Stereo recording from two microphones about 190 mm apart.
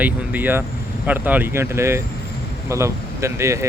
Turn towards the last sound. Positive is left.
turn(degrees=-15)  # may be behind; listen again after turning